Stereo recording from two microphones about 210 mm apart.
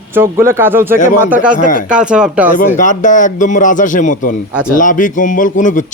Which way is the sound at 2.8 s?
35° left (ahead or behind).